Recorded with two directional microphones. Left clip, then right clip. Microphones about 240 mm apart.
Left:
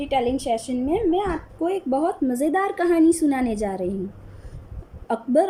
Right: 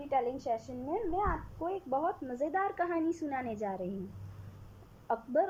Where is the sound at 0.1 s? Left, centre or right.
Centre.